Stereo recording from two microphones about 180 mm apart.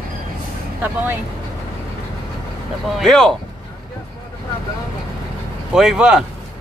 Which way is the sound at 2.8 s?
Centre (ahead or behind).